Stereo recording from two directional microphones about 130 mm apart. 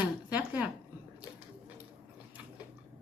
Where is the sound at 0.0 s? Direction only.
15° right (ahead or behind).